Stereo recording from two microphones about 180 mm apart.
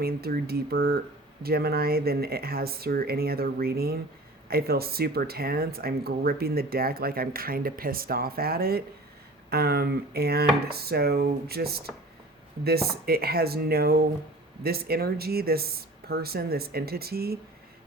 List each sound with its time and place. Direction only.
0.0 s speech: 60° right (ahead or behind)